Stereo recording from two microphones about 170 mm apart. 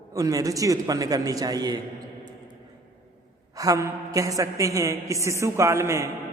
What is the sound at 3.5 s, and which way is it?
A woman's voice, 20° right (ahead or behind).